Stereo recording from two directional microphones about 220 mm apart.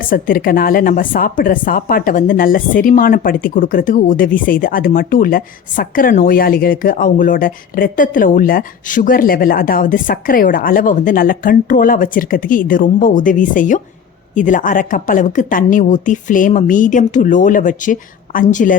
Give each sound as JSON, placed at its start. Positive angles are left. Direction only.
{"t": 0.1, "sound": "speech", "side_deg": 40}